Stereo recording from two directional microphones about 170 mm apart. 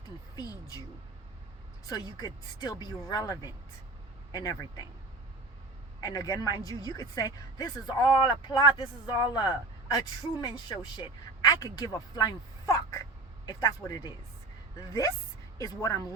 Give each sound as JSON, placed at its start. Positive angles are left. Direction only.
{"t": 0.3, "sound": "speech", "side_deg": 20}
{"t": 1.9, "sound": "speech", "side_deg": 20}
{"t": 6.0, "sound": "speech", "side_deg": 20}